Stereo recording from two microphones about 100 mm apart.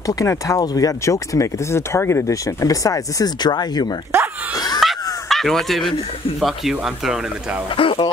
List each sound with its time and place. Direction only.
0.0 s speech: 35° left (ahead or behind)
4.8 s a sound: 5° right (ahead or behind)
5.3 s speech: 5° left (ahead or behind)
7.7 s speech: 60° left (ahead or behind)